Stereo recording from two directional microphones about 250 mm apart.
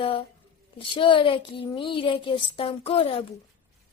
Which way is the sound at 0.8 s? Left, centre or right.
Centre.